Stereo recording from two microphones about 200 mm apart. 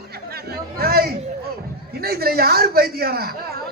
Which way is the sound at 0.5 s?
50° right (ahead or behind).